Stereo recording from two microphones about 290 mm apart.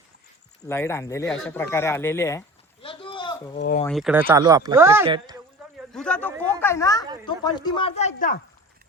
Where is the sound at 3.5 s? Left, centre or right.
Left.